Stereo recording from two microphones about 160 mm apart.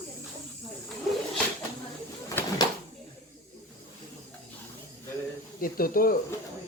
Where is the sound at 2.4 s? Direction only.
15° left (ahead or behind).